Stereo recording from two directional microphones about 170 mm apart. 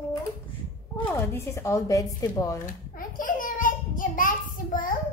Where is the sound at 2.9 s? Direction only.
55° left (ahead or behind).